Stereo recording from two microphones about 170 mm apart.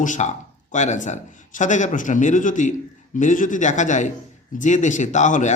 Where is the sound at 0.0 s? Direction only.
45° left (ahead or behind).